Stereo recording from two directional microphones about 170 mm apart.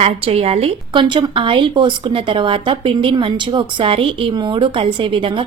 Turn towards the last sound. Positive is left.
turn(degrees=-30)  # may be behind; listen again after turning